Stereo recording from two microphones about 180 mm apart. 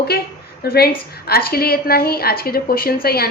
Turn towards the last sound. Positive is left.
turn(degrees=55)  # may be behind; listen again after turning